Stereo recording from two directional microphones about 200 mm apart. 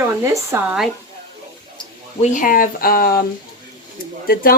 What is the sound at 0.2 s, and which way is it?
Speech, 10° right (ahead or behind).